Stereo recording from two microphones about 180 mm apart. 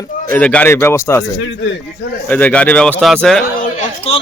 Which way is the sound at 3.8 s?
30° left (ahead or behind).